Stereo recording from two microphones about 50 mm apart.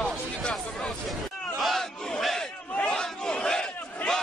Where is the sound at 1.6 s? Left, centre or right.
Centre.